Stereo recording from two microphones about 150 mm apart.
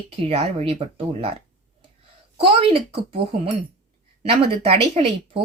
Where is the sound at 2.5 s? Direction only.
35° right (ahead or behind).